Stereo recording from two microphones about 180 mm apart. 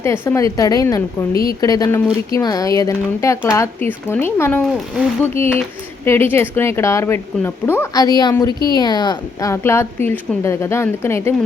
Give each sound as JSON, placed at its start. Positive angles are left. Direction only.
{"t": 0.0, "sound": "a woman's voice", "side_deg": 15}
{"t": 1.3, "sound": "a woman's voice", "side_deg": 55}
{"t": 1.6, "sound": "a woman's voice", "side_deg": 20}